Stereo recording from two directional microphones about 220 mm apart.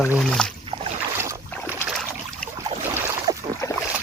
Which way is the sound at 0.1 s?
Centre (ahead or behind).